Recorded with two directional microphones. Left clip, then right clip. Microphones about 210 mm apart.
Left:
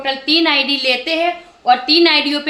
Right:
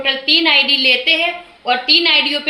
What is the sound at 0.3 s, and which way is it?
A woman's voice, 25° left (ahead or behind).